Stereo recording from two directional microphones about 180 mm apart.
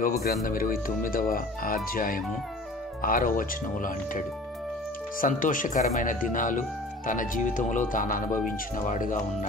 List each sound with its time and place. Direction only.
0.2 s speech: 55° left (ahead or behind)
5.2 s speech: 50° left (ahead or behind)